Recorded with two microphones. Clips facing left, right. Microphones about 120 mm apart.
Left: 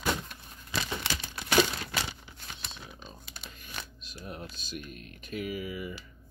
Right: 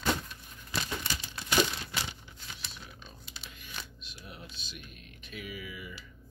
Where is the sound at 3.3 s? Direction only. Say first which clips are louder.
Even; 45° left (ahead or behind).